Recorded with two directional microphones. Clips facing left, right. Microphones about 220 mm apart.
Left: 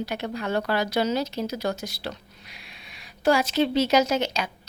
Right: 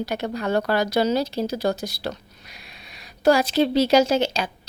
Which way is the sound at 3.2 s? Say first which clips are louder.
Right 3 dB; 35° right (ahead or behind).